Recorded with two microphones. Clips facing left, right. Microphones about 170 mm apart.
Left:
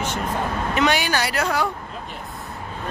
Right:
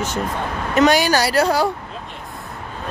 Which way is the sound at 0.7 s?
40° right (ahead or behind).